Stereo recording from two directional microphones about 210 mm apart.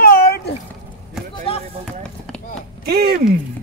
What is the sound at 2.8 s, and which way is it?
Speech, 50° right (ahead or behind).